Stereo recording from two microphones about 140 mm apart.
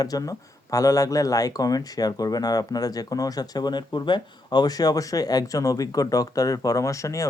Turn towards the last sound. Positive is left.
turn(degrees=25)  # may be behind; listen again after turning